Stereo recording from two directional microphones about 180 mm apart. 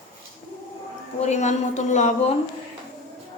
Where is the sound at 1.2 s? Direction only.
40° left (ahead or behind).